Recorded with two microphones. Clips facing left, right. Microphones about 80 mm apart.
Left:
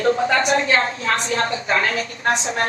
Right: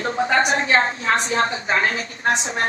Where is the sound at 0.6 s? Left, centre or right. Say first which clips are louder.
Even; right.